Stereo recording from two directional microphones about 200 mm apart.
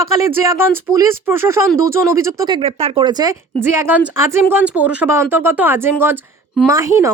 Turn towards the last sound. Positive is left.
turn(degrees=-15)  # may be behind; listen again after turning